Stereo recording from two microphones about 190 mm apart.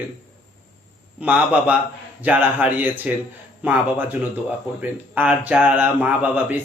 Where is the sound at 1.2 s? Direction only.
5° right (ahead or behind).